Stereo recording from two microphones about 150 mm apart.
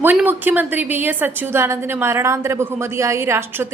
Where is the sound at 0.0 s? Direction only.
15° right (ahead or behind).